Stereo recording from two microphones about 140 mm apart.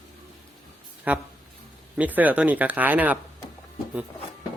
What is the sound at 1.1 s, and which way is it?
Speech, 10° right (ahead or behind).